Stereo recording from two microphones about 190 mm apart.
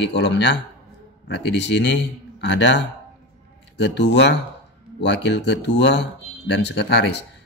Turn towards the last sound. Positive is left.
turn(degrees=65)  # may be behind; listen again after turning